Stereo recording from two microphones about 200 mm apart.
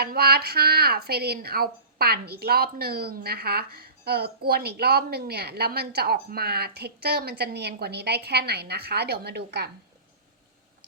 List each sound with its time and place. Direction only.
0.0 s a woman's voice: 50° right (ahead or behind)